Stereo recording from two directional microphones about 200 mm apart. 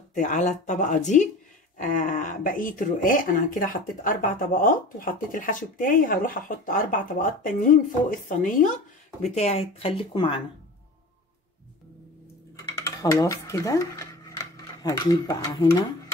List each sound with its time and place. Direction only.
0.1 s speech: 35° left (ahead or behind)
12.7 s speech: 15° left (ahead or behind)